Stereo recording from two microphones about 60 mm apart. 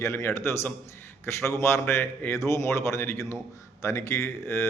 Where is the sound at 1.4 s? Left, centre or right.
Left.